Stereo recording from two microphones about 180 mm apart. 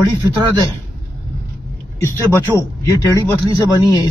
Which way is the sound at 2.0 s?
15° left (ahead or behind).